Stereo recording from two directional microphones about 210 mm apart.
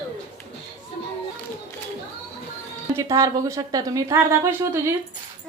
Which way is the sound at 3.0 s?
15° right (ahead or behind).